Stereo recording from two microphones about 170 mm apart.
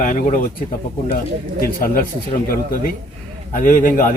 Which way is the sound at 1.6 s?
60° left (ahead or behind).